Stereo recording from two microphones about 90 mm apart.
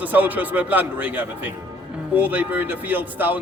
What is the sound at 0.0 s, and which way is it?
A man's voice, 20° right (ahead or behind).